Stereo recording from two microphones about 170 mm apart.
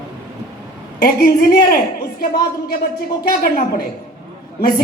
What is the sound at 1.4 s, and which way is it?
A woman's voice, 65° left (ahead or behind).